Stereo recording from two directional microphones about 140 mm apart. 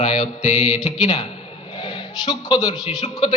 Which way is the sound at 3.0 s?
50° left (ahead or behind).